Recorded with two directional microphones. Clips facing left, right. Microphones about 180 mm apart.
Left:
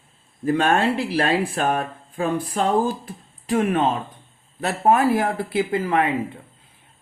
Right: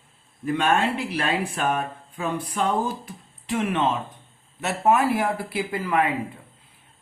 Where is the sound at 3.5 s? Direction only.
35° left (ahead or behind).